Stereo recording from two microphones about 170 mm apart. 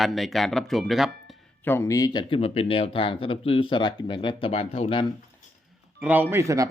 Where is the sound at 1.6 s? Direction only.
15° left (ahead or behind); by 5.0 s 35° left (ahead or behind).